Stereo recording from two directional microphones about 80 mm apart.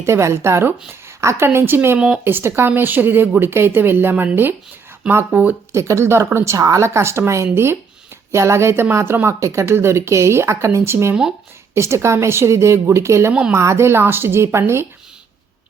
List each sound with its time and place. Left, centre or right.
0.0 s a woman's voice: right
2.0 s speech: centre
2.2 s a woman's voice: right
5.7 s speech: right